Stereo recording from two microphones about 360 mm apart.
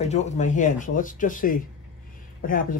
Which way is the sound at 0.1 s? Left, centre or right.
Centre.